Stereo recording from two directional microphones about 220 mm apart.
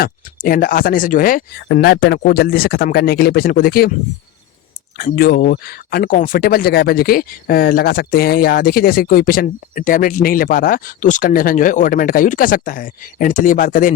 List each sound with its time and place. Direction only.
0.0 s speech: 40° left (ahead or behind)
4.9 s speech: 40° left (ahead or behind)